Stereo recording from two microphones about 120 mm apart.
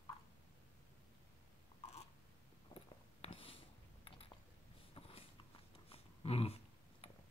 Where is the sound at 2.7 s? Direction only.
50° left (ahead or behind).